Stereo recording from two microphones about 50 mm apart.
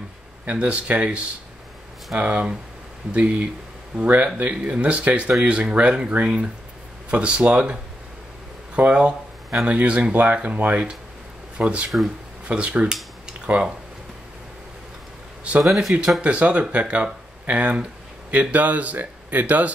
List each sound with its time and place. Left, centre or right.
0.5 s speech: right
8.7 s a sound: right
9.7 s speech: right
15.6 s speech: centre
16.2 s speech: right